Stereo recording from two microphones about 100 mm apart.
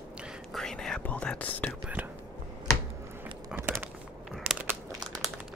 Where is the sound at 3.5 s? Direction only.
15° right (ahead or behind).